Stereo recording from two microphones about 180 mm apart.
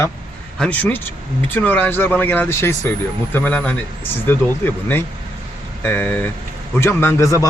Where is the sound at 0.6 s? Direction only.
5° left (ahead or behind).